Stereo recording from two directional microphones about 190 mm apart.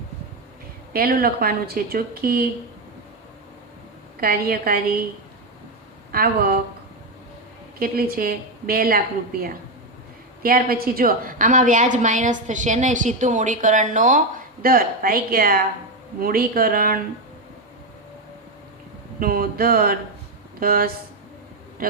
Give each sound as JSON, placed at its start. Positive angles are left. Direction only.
{"t": 0.9, "sound": "a woman's voice", "side_deg": -50}
{"t": 4.2, "sound": "a woman's voice", "side_deg": -50}
{"t": 6.1, "sound": "a woman's voice", "side_deg": -50}
{"t": 7.8, "sound": "a woman's voice", "side_deg": -50}
{"t": 10.4, "sound": "a woman's voice", "side_deg": -50}
{"t": 19.2, "sound": "a woman's voice", "side_deg": -50}